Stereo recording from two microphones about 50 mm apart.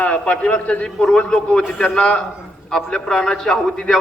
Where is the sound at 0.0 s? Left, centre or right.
Left.